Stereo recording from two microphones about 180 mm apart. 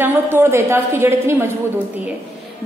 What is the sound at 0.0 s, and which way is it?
A woman's voice, 10° right (ahead or behind).